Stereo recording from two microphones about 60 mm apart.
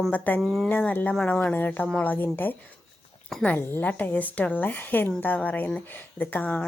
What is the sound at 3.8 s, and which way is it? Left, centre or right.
A woman's voice, left.